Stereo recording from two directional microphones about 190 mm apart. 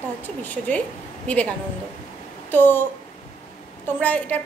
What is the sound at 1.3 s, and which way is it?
Speech, 10° left (ahead or behind).